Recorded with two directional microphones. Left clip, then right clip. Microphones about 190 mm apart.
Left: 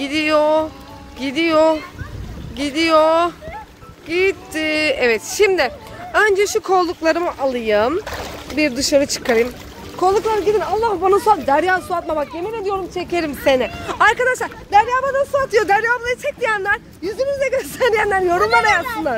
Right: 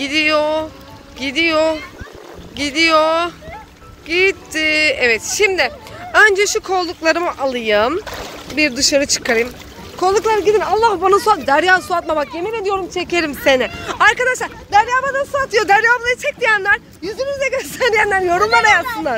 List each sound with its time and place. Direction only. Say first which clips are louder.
0.0 s music: right 1 dB; 20° left (ahead or behind)
1.2 s speech: even; 25° left (ahead or behind)
4.1 s speech: right 3 dB; 10° left (ahead or behind)
4.6 s speech: right 2 dB; 25° left (ahead or behind)
6.1 s speech: right 4 dB; 5° left (ahead or behind)
6.6 s speech: left 2 dB; 35° left (ahead or behind)
7.0 s speech: right 2 dB; 15° left (ahead or behind)
7.2 s speech: right 1 dB; 5° left (ahead or behind)
10.5 s speech: right 3 dB; 10° right (ahead or behind)
10.8 s speech: right 3 dB; centre (ahead or behind)
12.4 s speech: right 3 dB; 15° right (ahead or behind); by 13.7 s centre (ahead or behind)
13.8 s speech: right 1 dB; 25° left (ahead or behind)
15.6 s speech: right 4 dB; 5° left (ahead or behind)
17.0 s speech: even; 25° left (ahead or behind); by 18.9 s 10° left (ahead or behind)